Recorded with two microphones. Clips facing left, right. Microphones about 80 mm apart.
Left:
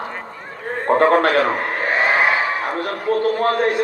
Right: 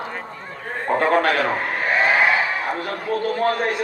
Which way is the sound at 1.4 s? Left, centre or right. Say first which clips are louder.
Left 2 dB; left.